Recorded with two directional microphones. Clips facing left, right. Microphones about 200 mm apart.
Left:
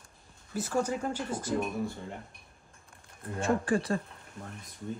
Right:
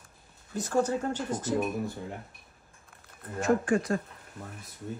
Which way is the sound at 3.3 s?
30° left (ahead or behind).